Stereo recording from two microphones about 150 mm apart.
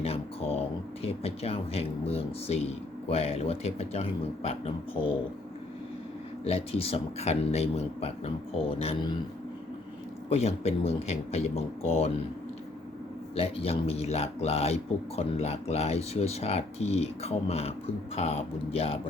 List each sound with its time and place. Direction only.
0.0 s a sound: 40° left (ahead or behind)
1.0 s speech: 40° left (ahead or behind)
6.4 s speech: 40° left (ahead or behind)
10.3 s speech: 45° left (ahead or behind)
13.3 s speech: 40° left (ahead or behind)